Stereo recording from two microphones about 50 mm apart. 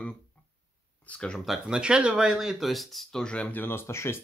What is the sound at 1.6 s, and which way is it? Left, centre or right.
Speech, centre.